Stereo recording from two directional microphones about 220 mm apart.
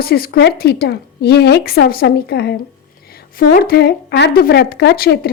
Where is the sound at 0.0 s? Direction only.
45° left (ahead or behind).